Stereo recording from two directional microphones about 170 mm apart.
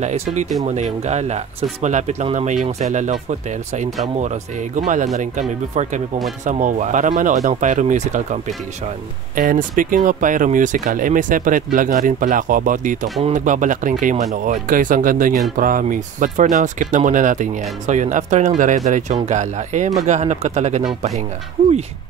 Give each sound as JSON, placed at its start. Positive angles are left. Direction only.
{"t": 0.0, "sound": "speech", "side_deg": -40}
{"t": 9.3, "sound": "speech", "side_deg": -55}